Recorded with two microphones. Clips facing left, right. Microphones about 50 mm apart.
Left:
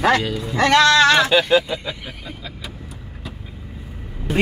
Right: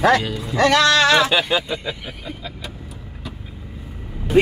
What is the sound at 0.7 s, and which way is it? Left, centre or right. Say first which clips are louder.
Speech: left 3 dB; left.